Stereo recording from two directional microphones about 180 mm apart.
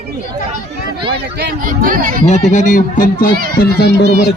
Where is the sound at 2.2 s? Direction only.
40° left (ahead or behind).